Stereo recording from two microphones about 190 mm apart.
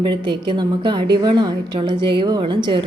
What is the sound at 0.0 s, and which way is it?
A woman's voice, 25° right (ahead or behind).